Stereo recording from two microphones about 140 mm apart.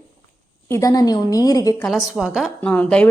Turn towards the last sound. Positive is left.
turn(degrees=10)  # may be behind; listen again after turning